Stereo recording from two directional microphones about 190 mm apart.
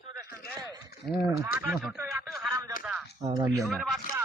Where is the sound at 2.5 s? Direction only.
15° right (ahead or behind).